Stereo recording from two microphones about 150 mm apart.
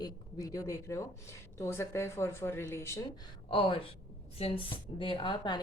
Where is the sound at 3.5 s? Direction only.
35° left (ahead or behind).